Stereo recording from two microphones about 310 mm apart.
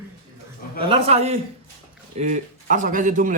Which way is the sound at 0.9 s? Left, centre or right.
Centre.